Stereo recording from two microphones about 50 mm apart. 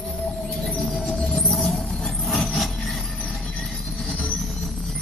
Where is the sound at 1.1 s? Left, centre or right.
Centre.